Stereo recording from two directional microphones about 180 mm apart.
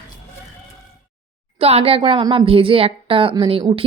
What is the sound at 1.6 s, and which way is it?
A woman's voice, 35° right (ahead or behind).